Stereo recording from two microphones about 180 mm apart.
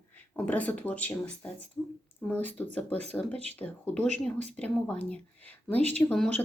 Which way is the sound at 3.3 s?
35° right (ahead or behind).